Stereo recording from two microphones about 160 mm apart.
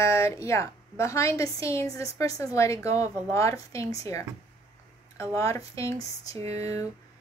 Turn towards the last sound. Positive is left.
turn(degrees=-40)  # may be behind; listen again after turning